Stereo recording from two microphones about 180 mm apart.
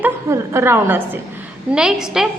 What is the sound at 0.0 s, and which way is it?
A woman's voice, 15° right (ahead or behind).